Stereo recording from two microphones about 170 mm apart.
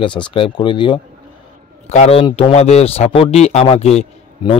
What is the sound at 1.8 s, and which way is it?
A man's voice, 40° left (ahead or behind).